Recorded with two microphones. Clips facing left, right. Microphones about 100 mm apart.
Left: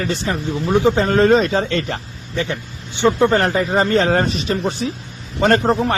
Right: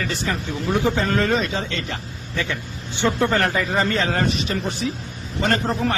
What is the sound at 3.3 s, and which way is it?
Speech, 30° left (ahead or behind).